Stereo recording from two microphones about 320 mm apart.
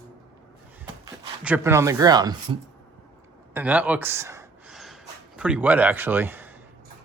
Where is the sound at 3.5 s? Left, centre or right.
Centre.